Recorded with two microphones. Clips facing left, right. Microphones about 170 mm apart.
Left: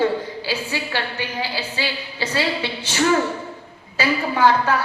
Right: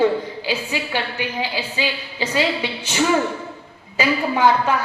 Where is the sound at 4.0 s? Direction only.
15° right (ahead or behind).